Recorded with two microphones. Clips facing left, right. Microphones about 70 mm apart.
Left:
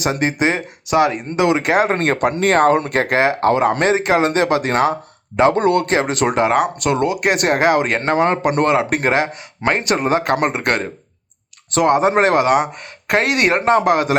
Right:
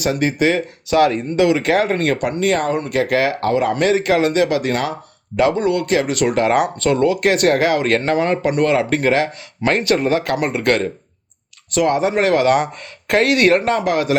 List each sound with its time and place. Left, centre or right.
0.0 s speech: left
2.4 s speech: left
5.5 s speech: left
5.9 s speech: left
9.0 s speech: left
12.5 s speech: centre
13.1 s speech: left